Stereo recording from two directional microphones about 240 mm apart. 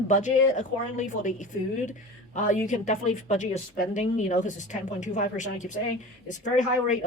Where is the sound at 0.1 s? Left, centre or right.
Left.